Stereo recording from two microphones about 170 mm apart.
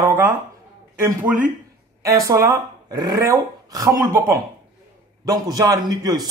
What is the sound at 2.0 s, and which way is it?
A man's voice, 20° right (ahead or behind).